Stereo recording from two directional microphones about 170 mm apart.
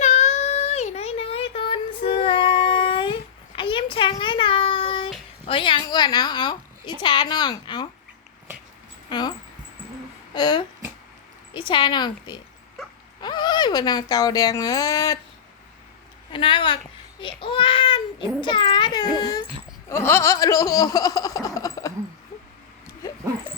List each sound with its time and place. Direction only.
0.0 s a sound: 40° left (ahead or behind)
5.5 s a woman's voice: 30° left (ahead or behind)
9.0 s speech: 25° left (ahead or behind)
10.3 s a woman's voice: 25° left (ahead or behind)
16.3 s a woman's voice: 30° left (ahead or behind)
17.2 s child singing: 30° left (ahead or behind)
19.9 s a sound: 15° left (ahead or behind)